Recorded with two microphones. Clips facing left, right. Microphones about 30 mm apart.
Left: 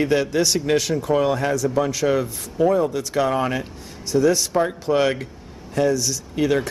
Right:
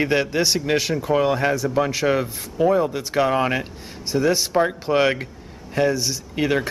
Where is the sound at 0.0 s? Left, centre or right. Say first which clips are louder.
Left 1 dB; right.